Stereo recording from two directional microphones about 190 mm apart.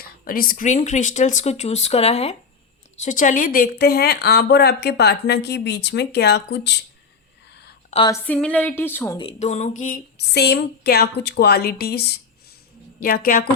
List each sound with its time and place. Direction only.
0.0 s speech: 50° left (ahead or behind)
7.9 s speech: 40° left (ahead or behind)
8.3 s a woman's voice: 5° left (ahead or behind)
9.4 s speech: 35° left (ahead or behind)
10.2 s a woman's voice: 60° left (ahead or behind)